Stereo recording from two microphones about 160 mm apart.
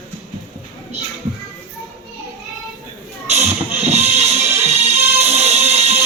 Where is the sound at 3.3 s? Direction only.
45° right (ahead or behind).